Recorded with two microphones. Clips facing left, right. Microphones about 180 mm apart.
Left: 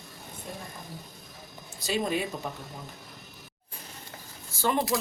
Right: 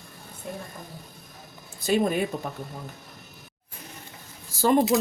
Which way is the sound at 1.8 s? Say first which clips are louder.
Right 5 dB; 50° right (ahead or behind).